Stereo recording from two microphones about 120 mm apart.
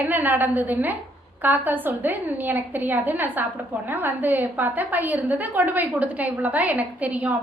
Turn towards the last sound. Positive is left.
turn(degrees=-10)  # may be behind; listen again after turning